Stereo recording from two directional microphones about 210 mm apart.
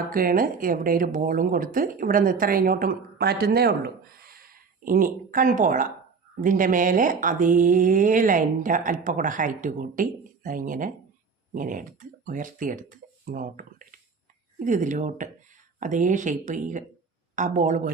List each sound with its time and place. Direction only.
0.1 s speech: 45° right (ahead or behind)